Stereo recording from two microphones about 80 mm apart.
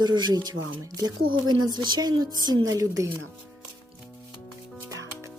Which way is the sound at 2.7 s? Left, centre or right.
Right.